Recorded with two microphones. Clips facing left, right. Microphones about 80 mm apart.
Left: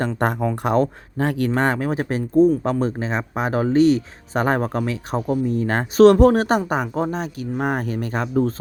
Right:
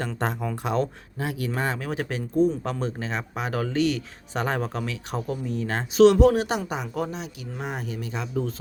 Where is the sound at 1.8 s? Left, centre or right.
Left.